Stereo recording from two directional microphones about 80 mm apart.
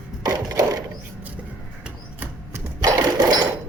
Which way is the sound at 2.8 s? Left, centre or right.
Right.